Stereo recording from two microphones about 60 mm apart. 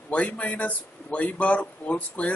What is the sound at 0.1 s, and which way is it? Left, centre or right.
A man's voice, left.